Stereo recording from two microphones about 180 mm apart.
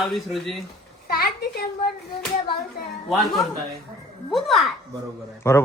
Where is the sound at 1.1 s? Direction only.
60° left (ahead or behind).